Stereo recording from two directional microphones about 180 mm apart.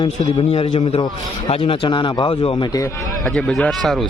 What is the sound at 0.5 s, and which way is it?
A man's voice, 30° left (ahead or behind).